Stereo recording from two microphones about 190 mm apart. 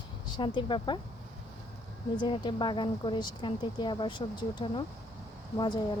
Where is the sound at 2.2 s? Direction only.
25° left (ahead or behind).